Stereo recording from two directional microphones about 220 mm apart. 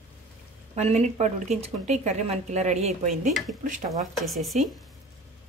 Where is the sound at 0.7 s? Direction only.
30° right (ahead or behind).